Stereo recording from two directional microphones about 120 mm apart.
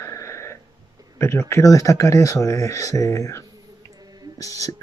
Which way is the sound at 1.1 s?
20° left (ahead or behind).